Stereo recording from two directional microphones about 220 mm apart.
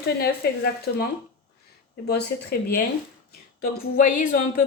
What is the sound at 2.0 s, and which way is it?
A woman's voice, 45° left (ahead or behind).